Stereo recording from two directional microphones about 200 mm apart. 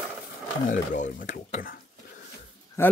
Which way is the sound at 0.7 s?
40° left (ahead or behind).